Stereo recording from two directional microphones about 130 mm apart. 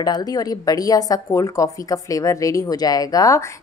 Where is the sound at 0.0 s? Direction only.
30° left (ahead or behind).